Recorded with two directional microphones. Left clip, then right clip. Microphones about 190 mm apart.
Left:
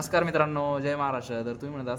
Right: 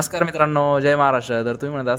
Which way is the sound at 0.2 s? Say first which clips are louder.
Right 8 dB; 40° right (ahead or behind).